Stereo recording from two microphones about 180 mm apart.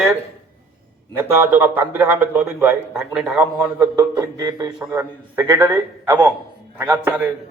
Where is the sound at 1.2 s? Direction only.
10° right (ahead or behind).